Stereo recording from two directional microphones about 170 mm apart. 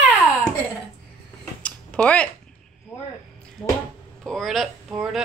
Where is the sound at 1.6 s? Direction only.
5° left (ahead or behind).